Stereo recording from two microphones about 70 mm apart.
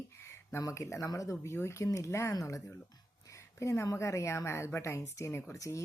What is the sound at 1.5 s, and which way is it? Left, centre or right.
A woman's voice, left.